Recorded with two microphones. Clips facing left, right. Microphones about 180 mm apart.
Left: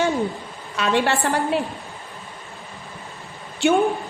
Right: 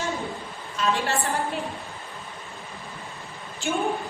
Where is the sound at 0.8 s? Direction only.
70° left (ahead or behind).